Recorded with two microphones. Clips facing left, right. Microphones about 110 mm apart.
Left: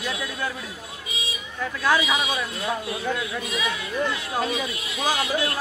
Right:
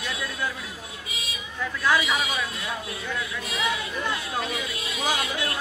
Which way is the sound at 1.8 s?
15° left (ahead or behind).